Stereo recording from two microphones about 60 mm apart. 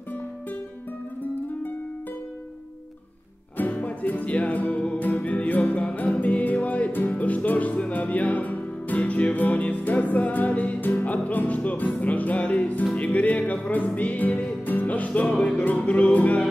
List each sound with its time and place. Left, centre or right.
3.5 s music: left